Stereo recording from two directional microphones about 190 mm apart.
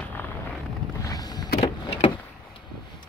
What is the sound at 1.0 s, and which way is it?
Vehicle, 20° left (ahead or behind).